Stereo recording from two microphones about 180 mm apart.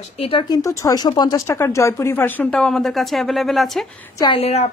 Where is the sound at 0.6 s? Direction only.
15° left (ahead or behind); by 3.8 s centre (ahead or behind).